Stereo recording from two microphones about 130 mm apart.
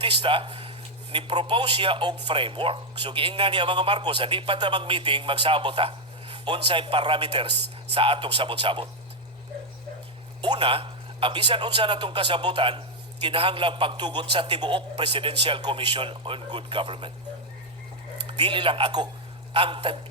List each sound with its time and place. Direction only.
0.0 s a man's voice: 40° right (ahead or behind)
10.4 s speech: 40° right (ahead or behind)
18.3 s speech: 40° right (ahead or behind)